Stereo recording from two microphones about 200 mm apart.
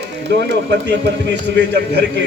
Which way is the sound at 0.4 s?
60° right (ahead or behind).